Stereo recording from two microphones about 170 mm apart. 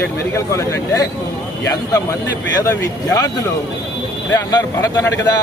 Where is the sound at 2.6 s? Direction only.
20° left (ahead or behind).